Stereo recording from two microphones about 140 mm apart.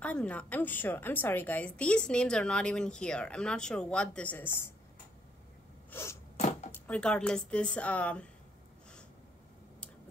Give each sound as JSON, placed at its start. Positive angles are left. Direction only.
{"t": 0.0, "sound": "a woman's voice", "side_deg": 10}
{"t": 5.9, "sound": "sneeze", "side_deg": 20}
{"t": 6.3, "sound": "chopping", "side_deg": 55}
{"t": 6.7, "sound": "a woman's voice", "side_deg": 5}